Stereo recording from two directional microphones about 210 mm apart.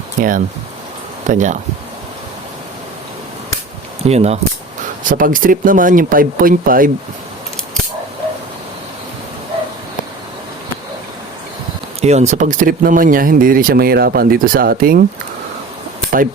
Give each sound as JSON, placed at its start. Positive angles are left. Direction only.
{"t": 0.2, "sound": "speech", "side_deg": -40}
{"t": 4.0, "sound": "speech", "side_deg": -30}
{"t": 5.0, "sound": "speech", "side_deg": -40}
{"t": 11.9, "sound": "speech", "side_deg": -30}